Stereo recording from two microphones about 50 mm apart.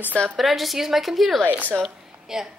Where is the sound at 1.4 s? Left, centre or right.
Right.